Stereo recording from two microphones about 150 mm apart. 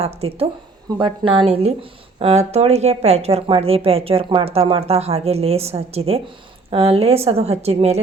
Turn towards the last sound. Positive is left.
turn(degrees=-45)  # may be behind; listen again after turning